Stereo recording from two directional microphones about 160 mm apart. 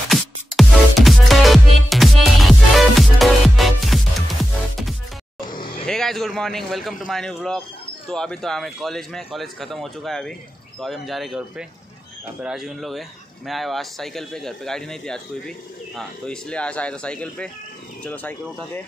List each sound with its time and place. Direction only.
0.1 s music: centre (ahead or behind)
5.5 s vehicle: 30° left (ahead or behind)
5.9 s a man's voice: centre (ahead or behind)